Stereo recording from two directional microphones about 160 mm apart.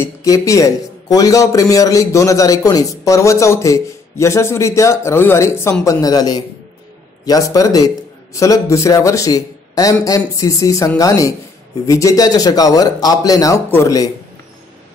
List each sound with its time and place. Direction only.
0.0 s a man's voice: 20° left (ahead or behind)